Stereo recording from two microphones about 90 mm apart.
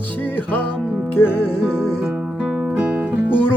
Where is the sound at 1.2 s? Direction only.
25° left (ahead or behind).